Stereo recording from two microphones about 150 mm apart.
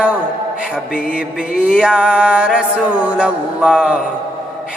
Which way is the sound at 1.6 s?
5° right (ahead or behind).